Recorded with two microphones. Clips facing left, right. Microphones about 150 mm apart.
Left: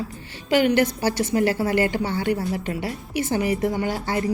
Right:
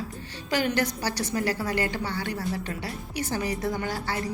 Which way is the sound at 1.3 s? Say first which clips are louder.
Left 7 dB; 25° left (ahead or behind).